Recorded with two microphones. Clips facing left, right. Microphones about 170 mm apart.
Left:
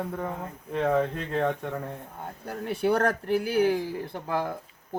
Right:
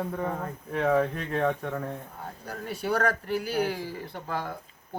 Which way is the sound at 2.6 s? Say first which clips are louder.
Left 3 dB; 55° left (ahead or behind).